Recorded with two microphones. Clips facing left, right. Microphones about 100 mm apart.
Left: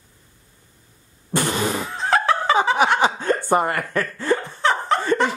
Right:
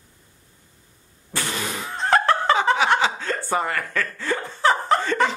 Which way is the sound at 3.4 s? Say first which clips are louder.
Left 2 dB; 50° left (ahead or behind).